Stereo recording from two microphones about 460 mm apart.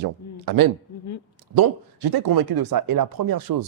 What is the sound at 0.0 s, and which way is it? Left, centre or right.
Speech, right.